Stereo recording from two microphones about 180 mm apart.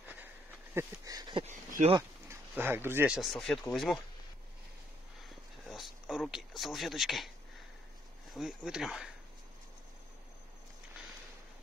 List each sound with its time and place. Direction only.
0.7 s a sound: 20° right (ahead or behind)
1.4 s speech: 40° right (ahead or behind)
2.2 s speech: 10° right (ahead or behind)
3.2 s speech: centre (ahead or behind)
5.7 s speech: centre (ahead or behind)
8.3 s speech: centre (ahead or behind)